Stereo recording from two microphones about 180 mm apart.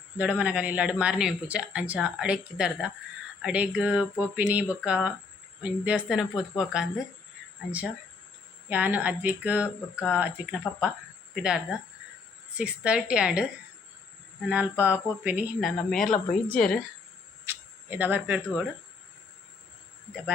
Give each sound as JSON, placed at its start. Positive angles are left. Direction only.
{"t": 0.2, "sound": "a woman's voice", "side_deg": -5}
{"t": 8.7, "sound": "a woman's voice", "side_deg": -10}
{"t": 14.5, "sound": "speech", "side_deg": -10}
{"t": 15.9, "sound": "a woman's voice", "side_deg": 0}
{"t": 17.4, "sound": "a sound", "side_deg": -10}